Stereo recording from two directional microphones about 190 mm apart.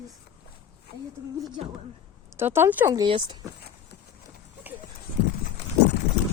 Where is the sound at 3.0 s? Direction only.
25° right (ahead or behind).